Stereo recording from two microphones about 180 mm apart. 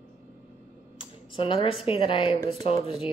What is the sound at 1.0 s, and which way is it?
Speech, 30° left (ahead or behind).